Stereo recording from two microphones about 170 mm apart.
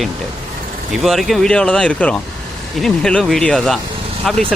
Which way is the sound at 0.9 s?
Centre (ahead or behind).